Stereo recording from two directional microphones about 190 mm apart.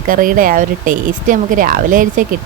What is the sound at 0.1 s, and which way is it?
Speech, 45° right (ahead or behind).